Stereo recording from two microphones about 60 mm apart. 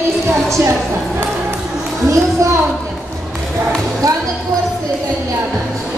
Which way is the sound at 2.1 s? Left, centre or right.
Right.